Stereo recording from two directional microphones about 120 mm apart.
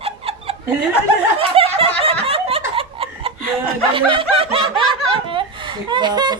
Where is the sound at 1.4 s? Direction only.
50° right (ahead or behind).